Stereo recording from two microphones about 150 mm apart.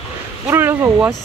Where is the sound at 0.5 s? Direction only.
15° right (ahead or behind).